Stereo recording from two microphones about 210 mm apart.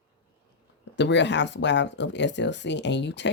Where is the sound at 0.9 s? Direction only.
55° left (ahead or behind).